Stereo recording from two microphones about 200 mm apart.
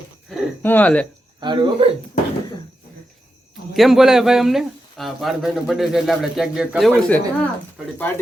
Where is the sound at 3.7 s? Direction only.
Centre (ahead or behind).